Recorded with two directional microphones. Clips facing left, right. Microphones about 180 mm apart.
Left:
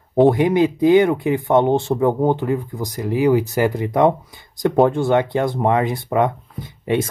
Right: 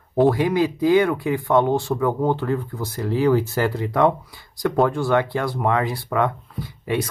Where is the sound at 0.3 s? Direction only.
20° left (ahead or behind).